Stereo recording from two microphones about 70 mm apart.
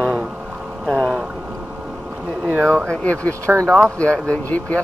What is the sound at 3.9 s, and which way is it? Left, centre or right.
Speech, centre.